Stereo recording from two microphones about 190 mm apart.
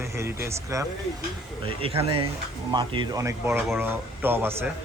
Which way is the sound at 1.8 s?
30° right (ahead or behind).